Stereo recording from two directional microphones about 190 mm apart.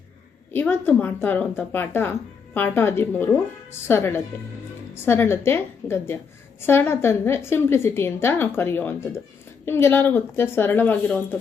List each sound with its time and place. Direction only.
0.5 s a woman's voice: 10° left (ahead or behind)